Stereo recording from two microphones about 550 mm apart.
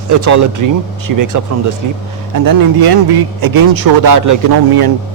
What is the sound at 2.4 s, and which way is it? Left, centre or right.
A man's voice, right.